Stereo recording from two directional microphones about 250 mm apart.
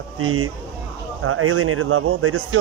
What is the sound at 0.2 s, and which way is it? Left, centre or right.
A man's voice, right.